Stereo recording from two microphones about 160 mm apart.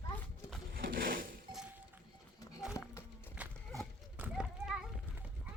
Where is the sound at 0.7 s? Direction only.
65° right (ahead or behind).